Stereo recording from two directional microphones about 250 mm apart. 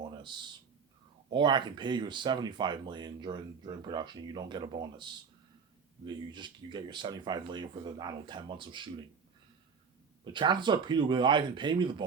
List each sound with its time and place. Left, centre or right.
1.3 s speech: centre
10.3 s speech: centre